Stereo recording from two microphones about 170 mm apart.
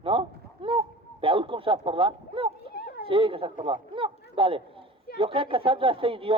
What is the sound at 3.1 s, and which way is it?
Speech, 30° right (ahead or behind).